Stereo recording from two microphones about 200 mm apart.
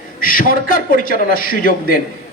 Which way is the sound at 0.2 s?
45° left (ahead or behind).